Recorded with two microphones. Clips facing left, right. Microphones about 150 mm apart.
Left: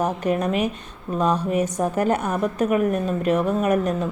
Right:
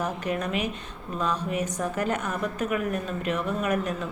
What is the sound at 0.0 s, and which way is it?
A woman's voice, 45° left (ahead or behind).